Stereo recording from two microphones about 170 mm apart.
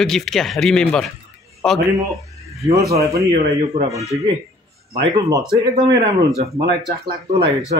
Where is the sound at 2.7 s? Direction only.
20° right (ahead or behind).